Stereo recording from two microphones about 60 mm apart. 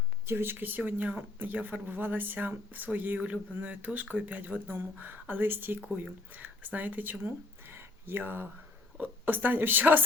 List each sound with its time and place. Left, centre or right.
0.3 s speech: right